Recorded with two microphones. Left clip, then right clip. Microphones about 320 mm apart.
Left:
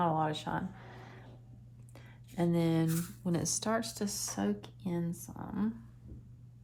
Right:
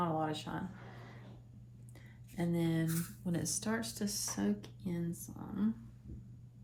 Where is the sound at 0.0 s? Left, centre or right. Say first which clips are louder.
Left 5 dB; left.